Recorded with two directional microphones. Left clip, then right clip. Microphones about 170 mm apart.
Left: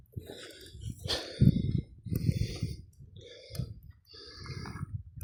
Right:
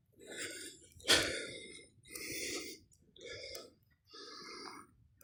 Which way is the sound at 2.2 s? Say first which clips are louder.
Even; 55° right (ahead or behind).